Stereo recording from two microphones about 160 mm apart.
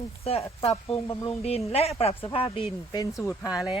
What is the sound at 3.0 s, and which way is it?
Speech, 20° left (ahead or behind).